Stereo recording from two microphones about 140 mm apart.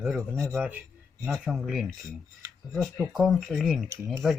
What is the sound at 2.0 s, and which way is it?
Speech, 20° right (ahead or behind).